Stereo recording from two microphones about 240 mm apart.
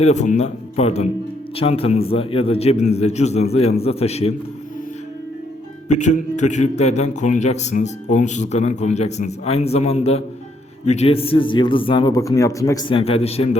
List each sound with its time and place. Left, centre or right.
0.0 s a man's voice: left
5.9 s a man's voice: left